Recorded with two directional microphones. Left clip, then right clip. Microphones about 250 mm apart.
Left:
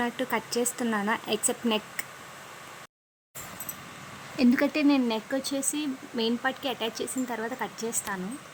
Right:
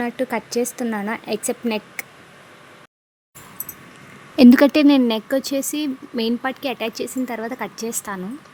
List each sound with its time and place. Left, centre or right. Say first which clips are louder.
0.0 s speech: right 5 dB; centre
4.4 s speech: right 12 dB; right